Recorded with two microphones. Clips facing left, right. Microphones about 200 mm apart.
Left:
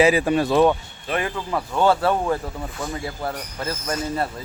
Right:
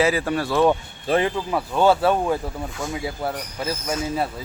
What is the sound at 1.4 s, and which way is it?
Speech, 15° right (ahead or behind).